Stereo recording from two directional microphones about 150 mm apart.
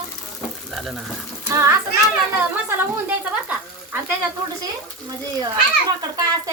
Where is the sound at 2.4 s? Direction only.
15° right (ahead or behind).